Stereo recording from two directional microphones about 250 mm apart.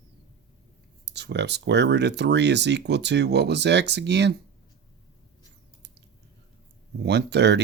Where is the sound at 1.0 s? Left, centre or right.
Right.